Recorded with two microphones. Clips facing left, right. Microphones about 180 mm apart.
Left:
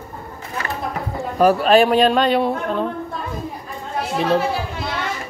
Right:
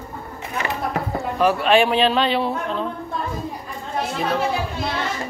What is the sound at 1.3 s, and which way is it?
A man's voice, 40° left (ahead or behind).